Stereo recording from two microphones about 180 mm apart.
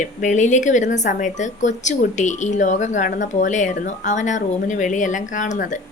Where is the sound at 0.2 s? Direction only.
40° left (ahead or behind).